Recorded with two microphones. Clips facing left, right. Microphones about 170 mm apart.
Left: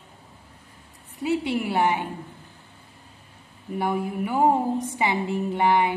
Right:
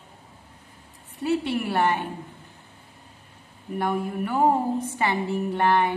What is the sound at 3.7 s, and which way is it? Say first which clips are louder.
A woman's voice: even; 10° left (ahead or behind).